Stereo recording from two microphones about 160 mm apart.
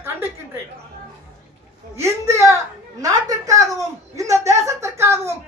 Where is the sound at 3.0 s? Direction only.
20° right (ahead or behind).